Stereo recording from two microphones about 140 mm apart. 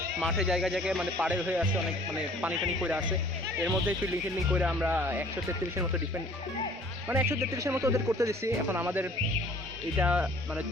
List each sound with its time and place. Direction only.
0.2 s speech: centre (ahead or behind)
7.1 s speech: 20° right (ahead or behind)